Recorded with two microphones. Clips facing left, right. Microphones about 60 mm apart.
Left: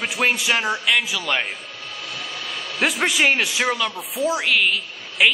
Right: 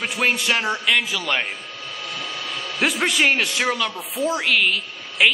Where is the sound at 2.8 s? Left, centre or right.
Centre.